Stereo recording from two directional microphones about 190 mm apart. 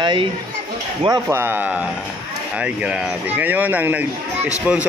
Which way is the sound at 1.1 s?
15° right (ahead or behind).